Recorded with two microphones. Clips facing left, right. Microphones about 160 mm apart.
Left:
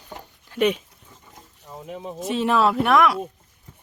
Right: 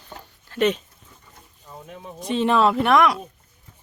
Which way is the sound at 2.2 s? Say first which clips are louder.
Right 1 dB; 5° left (ahead or behind).